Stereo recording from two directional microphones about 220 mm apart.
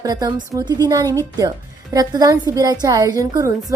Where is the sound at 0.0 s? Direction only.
15° right (ahead or behind).